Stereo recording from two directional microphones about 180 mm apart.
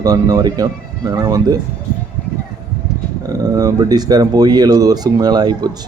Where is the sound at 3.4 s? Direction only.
20° right (ahead or behind).